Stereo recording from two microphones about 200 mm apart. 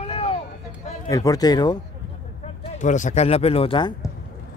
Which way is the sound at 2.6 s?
40° left (ahead or behind).